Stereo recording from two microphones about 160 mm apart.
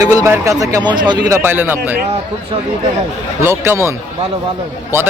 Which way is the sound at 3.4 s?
15° right (ahead or behind).